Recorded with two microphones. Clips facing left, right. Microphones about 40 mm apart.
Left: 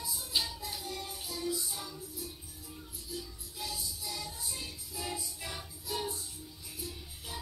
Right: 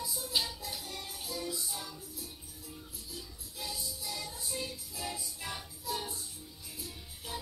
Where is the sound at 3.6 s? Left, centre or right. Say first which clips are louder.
Even; right.